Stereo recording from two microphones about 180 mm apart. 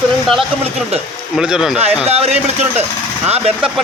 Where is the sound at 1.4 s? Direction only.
5° right (ahead or behind).